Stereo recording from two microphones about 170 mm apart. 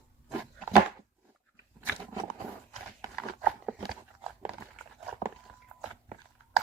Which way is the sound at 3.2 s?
5° right (ahead or behind).